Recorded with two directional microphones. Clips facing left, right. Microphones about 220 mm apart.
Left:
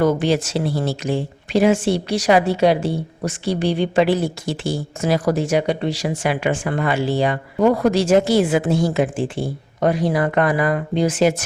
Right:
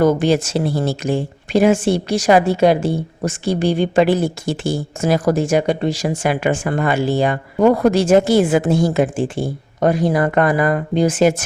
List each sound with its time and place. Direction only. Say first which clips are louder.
0.0 s speech: right 3 dB; 45° right (ahead or behind)